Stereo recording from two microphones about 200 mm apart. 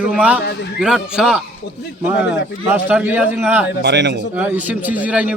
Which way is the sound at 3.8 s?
60° right (ahead or behind).